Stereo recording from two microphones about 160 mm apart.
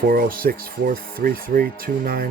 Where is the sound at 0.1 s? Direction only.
65° right (ahead or behind).